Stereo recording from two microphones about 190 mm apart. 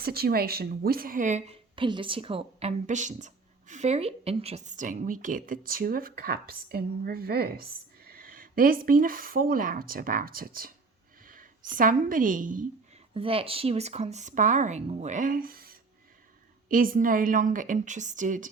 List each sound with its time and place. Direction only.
0.0 s a woman's voice: 55° right (ahead or behind)
13.1 s speech: 30° right (ahead or behind)